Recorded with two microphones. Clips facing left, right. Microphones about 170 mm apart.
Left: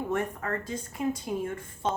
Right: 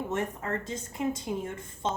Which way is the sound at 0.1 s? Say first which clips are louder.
Left 1 dB; 25° right (ahead or behind).